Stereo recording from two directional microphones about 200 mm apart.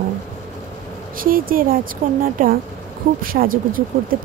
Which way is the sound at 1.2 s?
45° right (ahead or behind).